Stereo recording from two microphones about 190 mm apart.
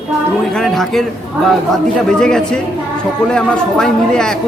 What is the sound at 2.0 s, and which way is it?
A woman's voice, 5° left (ahead or behind).